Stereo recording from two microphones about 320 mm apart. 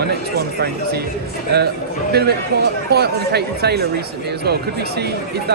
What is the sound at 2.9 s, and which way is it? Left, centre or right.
Speech, right.